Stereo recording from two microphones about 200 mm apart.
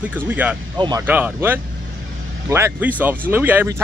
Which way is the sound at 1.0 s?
10° right (ahead or behind).